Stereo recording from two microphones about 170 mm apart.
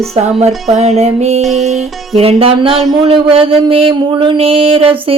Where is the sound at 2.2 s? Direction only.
35° right (ahead or behind).